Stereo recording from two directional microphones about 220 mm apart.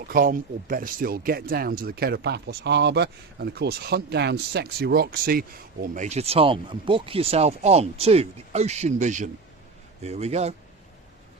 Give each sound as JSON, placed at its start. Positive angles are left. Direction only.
{"t": 0.1, "sound": "speech", "side_deg": -40}